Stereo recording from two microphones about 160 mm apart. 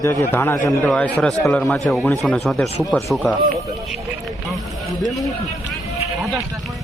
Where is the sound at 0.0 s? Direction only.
20° left (ahead or behind); by 3.3 s centre (ahead or behind).